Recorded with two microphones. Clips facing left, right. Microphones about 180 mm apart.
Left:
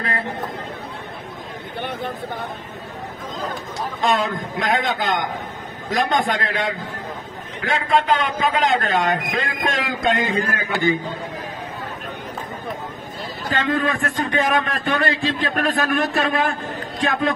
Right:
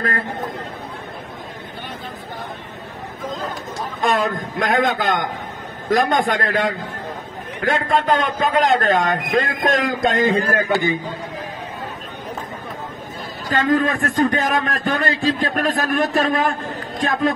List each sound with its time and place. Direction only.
4.0 s a man's voice: 55° right (ahead or behind)
13.5 s a man's voice: 45° right (ahead or behind)